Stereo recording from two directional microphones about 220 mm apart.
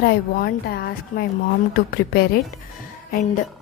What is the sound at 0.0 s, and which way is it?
A woman's voice, 45° left (ahead or behind).